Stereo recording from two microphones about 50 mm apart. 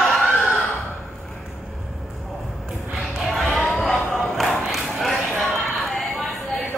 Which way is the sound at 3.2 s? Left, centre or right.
Centre.